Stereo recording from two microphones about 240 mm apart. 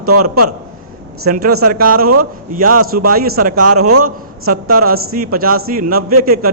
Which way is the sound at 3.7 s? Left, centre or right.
Right.